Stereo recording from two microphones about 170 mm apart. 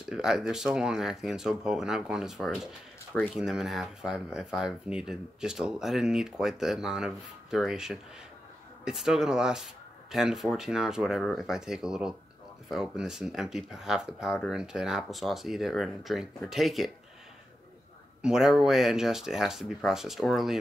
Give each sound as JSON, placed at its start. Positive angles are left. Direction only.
{"t": 0.1, "sound": "speech", "side_deg": -5}
{"t": 18.2, "sound": "speech", "side_deg": -5}